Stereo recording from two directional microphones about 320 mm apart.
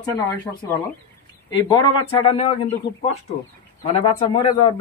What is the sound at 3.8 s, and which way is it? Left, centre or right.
Speech, centre.